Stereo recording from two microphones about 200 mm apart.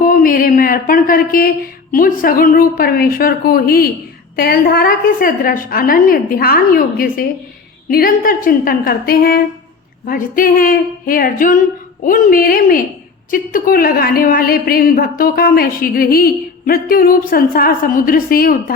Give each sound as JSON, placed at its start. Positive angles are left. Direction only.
{"t": 0.0, "sound": "a woman's voice", "side_deg": 45}